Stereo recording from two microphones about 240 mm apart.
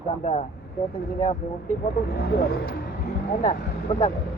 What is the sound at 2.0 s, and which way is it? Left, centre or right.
Speech, left.